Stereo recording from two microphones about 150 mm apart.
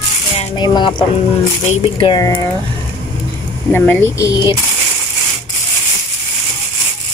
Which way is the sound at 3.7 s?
15° left (ahead or behind).